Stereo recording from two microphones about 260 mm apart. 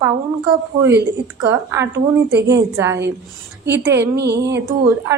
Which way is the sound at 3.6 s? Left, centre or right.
Right.